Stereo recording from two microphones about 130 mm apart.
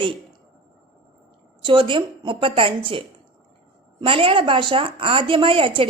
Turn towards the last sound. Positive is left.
turn(degrees=-45)  # may be behind; listen again after turning